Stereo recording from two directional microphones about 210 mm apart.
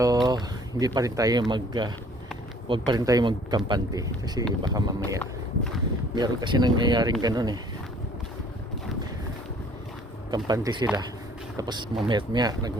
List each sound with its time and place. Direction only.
0.0 s speech: 20° right (ahead or behind)
10.3 s speech: 20° right (ahead or behind)